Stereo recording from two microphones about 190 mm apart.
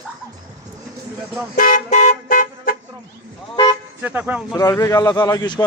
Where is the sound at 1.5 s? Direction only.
45° left (ahead or behind).